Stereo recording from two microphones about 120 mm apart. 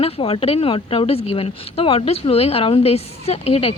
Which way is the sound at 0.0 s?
55° left (ahead or behind).